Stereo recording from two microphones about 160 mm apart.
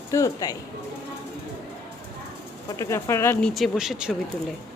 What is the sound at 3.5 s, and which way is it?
Speech, centre (ahead or behind).